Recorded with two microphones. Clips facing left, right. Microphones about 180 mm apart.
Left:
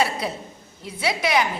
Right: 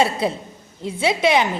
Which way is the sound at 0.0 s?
25° right (ahead or behind).